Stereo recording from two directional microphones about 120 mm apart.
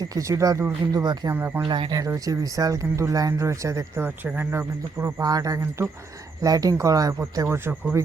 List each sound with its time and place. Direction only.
0.0 s speech: 30° right (ahead or behind)
1.3 s speech: 20° right (ahead or behind)
1.6 s speech: 40° right (ahead or behind); by 7.8 s 15° right (ahead or behind)